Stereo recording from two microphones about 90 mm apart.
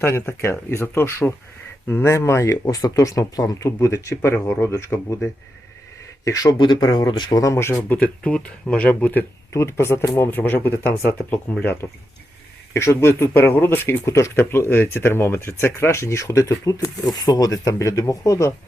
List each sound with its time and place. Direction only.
0.0 s speech: 25° left (ahead or behind); by 6.6 s 40° left (ahead or behind)
6.6 s speech: 60° left (ahead or behind)
6.8 s speech: 40° left (ahead or behind)
7.9 s speech: 15° left (ahead or behind)
9.5 s speech: 30° left (ahead or behind)